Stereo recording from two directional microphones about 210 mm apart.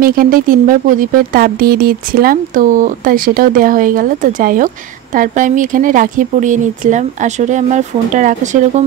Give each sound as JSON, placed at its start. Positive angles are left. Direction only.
{"t": 0.0, "sound": "speech", "side_deg": -40}